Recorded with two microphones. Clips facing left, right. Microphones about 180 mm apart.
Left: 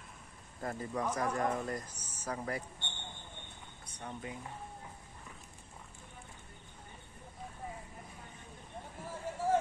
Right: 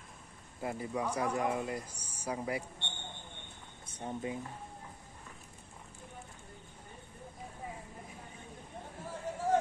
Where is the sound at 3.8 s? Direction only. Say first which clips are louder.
Right 6 dB; 25° right (ahead or behind).